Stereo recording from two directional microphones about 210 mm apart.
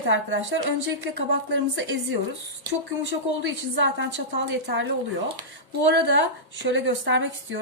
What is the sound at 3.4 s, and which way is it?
A woman's voice, 60° right (ahead or behind).